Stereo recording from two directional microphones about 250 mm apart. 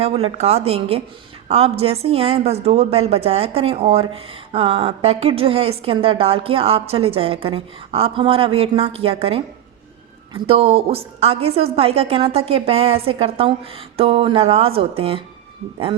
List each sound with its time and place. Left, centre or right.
0.0 s a woman's voice: right